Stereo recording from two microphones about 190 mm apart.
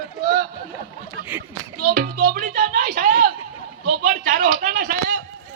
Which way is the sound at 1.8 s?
50° right (ahead or behind).